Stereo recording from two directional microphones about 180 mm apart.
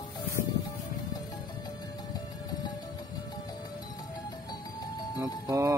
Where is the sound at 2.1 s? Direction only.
20° left (ahead or behind).